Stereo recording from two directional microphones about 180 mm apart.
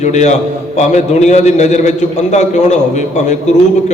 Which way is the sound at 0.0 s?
40° left (ahead or behind).